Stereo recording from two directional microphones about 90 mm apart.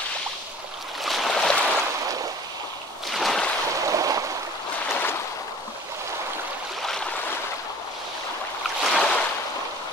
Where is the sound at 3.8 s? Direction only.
40° right (ahead or behind).